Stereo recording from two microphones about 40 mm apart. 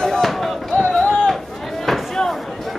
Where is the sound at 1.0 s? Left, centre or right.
Left.